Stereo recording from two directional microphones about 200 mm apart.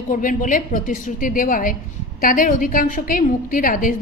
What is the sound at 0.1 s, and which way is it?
A woman's voice, 40° left (ahead or behind).